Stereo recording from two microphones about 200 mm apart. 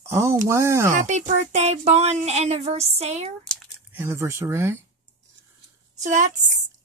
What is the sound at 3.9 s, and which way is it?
Speech, 10° right (ahead or behind).